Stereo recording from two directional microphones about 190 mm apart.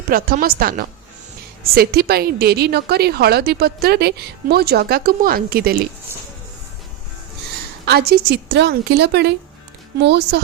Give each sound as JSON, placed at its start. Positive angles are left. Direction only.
{"t": 0.1, "sound": "a woman's voice", "side_deg": -50}
{"t": 7.9, "sound": "a woman's voice", "side_deg": -60}